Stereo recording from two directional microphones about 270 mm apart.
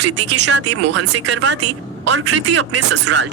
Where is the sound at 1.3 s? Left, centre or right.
Right.